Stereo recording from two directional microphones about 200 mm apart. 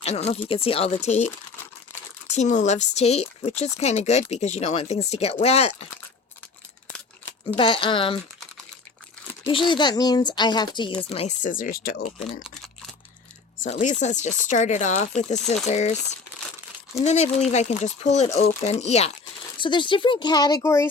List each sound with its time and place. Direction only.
0.0 s speech: 30° left (ahead or behind)
2.3 s speech: 35° left (ahead or behind)
7.5 s speech: 25° left (ahead or behind)
9.5 s speech: 25° left (ahead or behind); by 12.0 s 50° left (ahead or behind)
13.6 s speech: 40° left (ahead or behind)
17.0 s speech: 35° left (ahead or behind); by 20.9 s 15° left (ahead or behind)